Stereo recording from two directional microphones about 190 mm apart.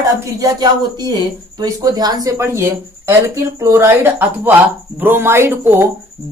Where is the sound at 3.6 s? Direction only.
15° right (ahead or behind).